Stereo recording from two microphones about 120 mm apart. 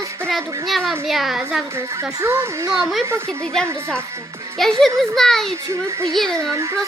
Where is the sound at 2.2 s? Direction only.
25° right (ahead or behind).